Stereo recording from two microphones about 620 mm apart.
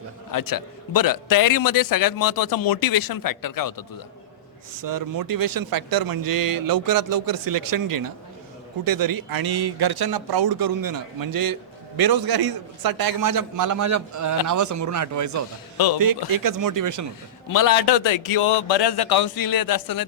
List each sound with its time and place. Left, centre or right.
0.3 s a man's voice: left
4.7 s speech: right
17.5 s a man's voice: left